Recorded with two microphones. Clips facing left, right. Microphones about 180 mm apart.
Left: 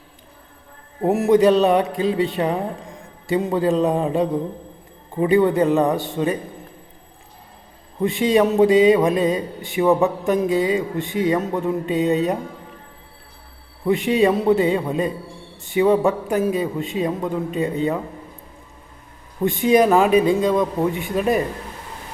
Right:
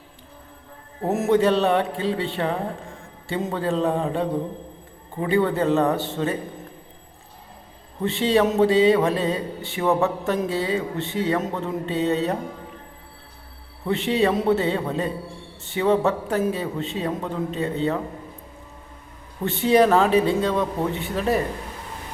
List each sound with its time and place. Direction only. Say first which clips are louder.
1.0 s speech: left 4 dB; 10° left (ahead or behind)
8.0 s speech: left 3 dB; 15° left (ahead or behind)
13.8 s speech: left 4 dB; 15° left (ahead or behind)
19.5 s speech: left 2 dB; 15° left (ahead or behind)